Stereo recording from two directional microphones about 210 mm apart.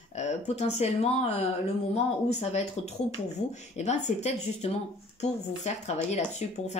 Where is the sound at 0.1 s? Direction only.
30° left (ahead or behind).